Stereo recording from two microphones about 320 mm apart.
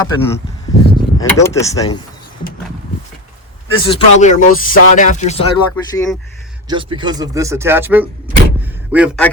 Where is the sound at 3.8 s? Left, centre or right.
Left.